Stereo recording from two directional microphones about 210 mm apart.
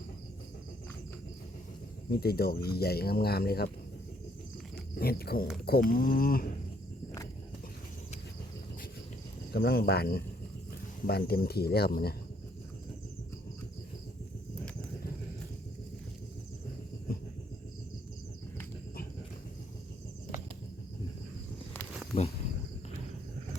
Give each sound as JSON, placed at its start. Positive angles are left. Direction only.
{"t": 2.0, "sound": "speech", "side_deg": 45}
{"t": 4.9, "sound": "speech", "side_deg": 45}
{"t": 9.5, "sound": "speech", "side_deg": 50}